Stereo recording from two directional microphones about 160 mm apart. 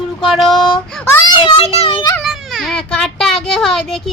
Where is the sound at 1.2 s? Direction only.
30° left (ahead or behind).